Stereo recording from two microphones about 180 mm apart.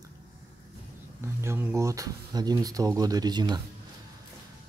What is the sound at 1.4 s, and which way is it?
Speech, 15° right (ahead or behind).